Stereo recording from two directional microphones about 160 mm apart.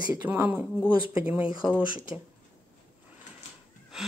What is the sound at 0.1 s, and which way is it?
Speech, 15° right (ahead or behind).